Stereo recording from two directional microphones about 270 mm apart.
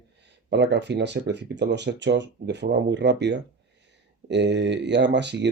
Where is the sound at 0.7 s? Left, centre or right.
Right.